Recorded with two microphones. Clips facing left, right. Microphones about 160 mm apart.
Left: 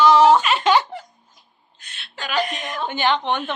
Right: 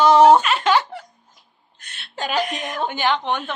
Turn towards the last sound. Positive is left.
turn(degrees=0)  # may be behind; listen again after turning